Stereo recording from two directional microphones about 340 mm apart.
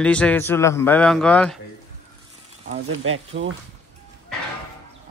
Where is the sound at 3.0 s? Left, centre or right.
Right.